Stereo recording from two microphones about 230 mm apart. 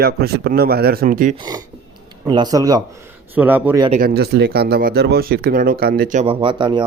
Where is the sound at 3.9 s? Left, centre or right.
Right.